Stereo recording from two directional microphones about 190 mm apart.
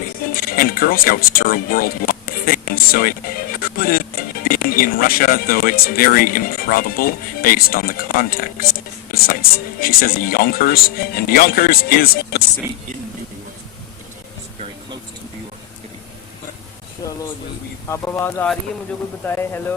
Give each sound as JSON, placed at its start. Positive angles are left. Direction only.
{"t": 0.3, "sound": "speech", "side_deg": 50}
{"t": 9.1, "sound": "music", "side_deg": 50}
{"t": 9.8, "sound": "speech", "side_deg": 50}
{"t": 17.8, "sound": "speech", "side_deg": 15}